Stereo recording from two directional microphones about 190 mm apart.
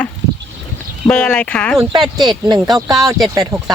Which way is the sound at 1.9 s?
25° right (ahead or behind).